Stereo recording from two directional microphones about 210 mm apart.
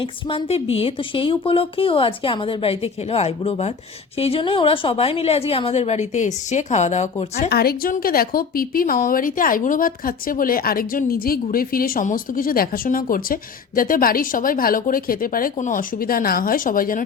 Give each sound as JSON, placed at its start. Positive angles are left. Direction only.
{"t": 0.0, "sound": "a woman's voice", "side_deg": 25}
{"t": 7.5, "sound": "a woman's voice", "side_deg": 45}